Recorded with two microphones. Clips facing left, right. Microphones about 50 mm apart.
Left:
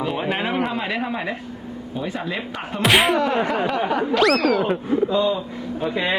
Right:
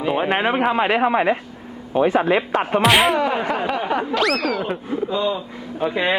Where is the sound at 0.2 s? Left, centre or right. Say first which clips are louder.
Right 4 dB; right.